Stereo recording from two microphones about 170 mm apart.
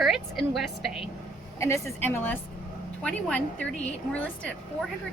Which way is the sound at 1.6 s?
15° left (ahead or behind).